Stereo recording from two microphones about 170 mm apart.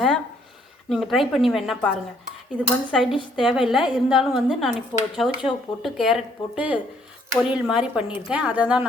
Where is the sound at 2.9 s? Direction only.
Centre (ahead or behind).